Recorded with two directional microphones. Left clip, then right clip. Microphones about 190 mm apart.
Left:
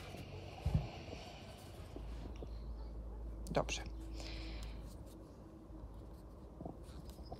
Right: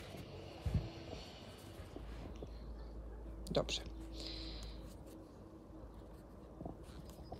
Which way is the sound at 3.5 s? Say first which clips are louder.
Even; 5° right (ahead or behind).